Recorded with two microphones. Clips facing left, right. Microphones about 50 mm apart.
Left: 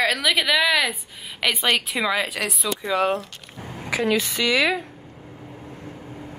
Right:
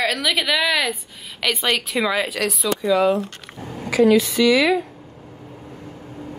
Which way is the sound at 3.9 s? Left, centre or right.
Left.